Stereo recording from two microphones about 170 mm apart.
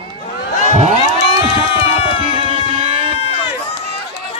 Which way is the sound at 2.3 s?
35° right (ahead or behind).